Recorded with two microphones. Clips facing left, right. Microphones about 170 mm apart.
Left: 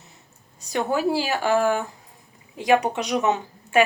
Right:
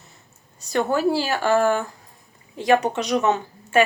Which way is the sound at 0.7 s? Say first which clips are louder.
Right 2 dB; 10° left (ahead or behind).